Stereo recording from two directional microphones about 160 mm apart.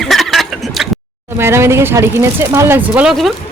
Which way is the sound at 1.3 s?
15° right (ahead or behind).